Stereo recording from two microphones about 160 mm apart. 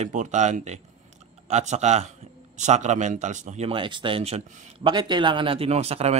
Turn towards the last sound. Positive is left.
turn(degrees=-40)  # may be behind; listen again after turning